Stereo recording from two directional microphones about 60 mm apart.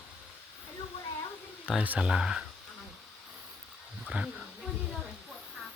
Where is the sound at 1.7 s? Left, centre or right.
Centre.